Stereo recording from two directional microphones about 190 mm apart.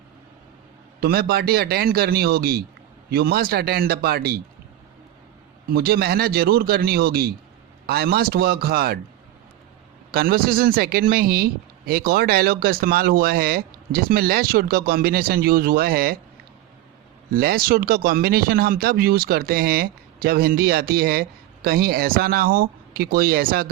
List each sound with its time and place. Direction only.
1.0 s a man's voice: 55° right (ahead or behind)
5.6 s speech: 55° right (ahead or behind)
10.1 s speech: 50° right (ahead or behind)
17.3 s speech: 50° right (ahead or behind)